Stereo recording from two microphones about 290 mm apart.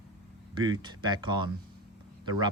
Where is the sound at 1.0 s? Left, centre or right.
Centre.